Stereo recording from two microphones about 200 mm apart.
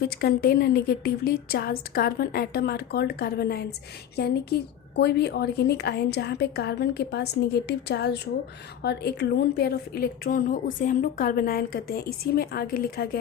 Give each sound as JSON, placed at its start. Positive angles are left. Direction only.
{"t": 0.2, "sound": "a woman's voice", "side_deg": 50}